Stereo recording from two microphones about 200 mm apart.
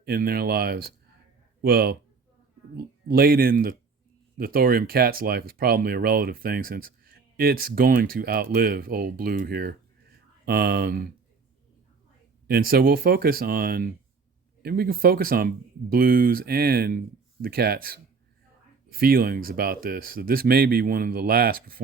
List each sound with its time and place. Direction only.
0.0 s speech: 50° right (ahead or behind)
12.5 s speech: 50° right (ahead or behind)